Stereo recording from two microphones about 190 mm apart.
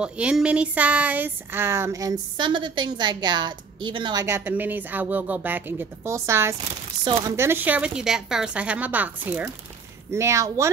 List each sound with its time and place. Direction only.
0.0 s speech: 5° right (ahead or behind)